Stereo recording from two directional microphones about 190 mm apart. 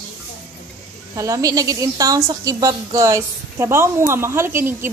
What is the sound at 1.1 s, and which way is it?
A woman's voice, 15° right (ahead or behind).